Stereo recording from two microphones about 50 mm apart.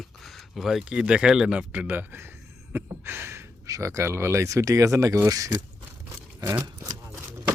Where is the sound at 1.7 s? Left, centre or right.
Right.